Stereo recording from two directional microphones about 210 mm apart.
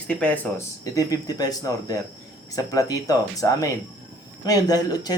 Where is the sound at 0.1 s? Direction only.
5° left (ahead or behind).